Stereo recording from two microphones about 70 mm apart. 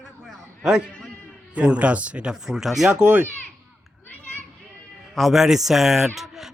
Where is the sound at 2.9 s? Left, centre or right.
Right.